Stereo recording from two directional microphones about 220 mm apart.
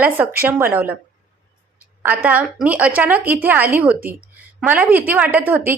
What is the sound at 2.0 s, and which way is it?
A woman's voice, 10° right (ahead or behind).